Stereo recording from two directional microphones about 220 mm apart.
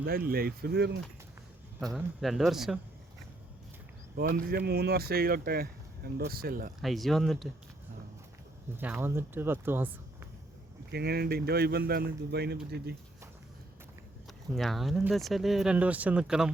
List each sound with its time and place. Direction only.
0.0 s speech: 40° right (ahead or behind)
1.8 s speech: centre (ahead or behind)
4.2 s speech: 40° right (ahead or behind)
6.8 s speech: centre (ahead or behind)
8.7 s speech: 10° right (ahead or behind)
10.9 s speech: 45° right (ahead or behind)
14.5 s speech: centre (ahead or behind)